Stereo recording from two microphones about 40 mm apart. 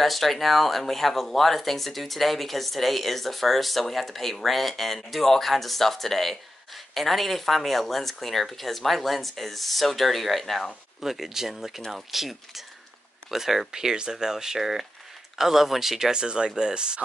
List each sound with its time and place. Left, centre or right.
0.0 s speech: centre
11.0 s speech: centre
16.1 s speech: right